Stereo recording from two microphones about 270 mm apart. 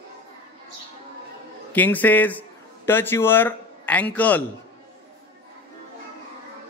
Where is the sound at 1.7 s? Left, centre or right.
Centre.